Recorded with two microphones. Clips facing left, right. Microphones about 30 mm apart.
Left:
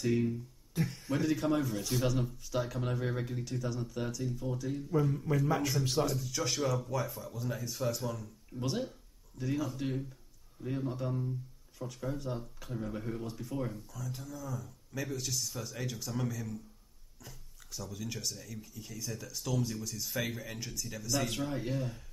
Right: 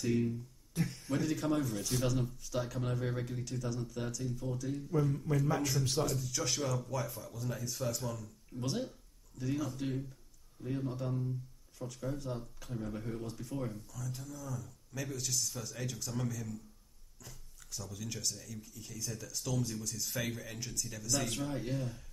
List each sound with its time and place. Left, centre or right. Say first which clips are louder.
0.0 s speech: left 2 dB; centre